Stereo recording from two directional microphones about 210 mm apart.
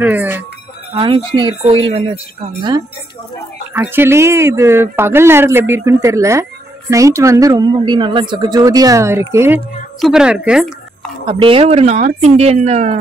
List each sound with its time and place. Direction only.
0.0 s a woman's voice: 10° right (ahead or behind)
0.9 s speech: 25° right (ahead or behind)
3.7 s a woman's voice: 10° right (ahead or behind)
9.9 s a woman's voice: centre (ahead or behind)
11.2 s speech: 25° right (ahead or behind)